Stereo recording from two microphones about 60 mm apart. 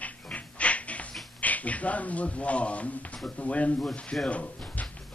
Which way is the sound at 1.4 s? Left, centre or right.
Left.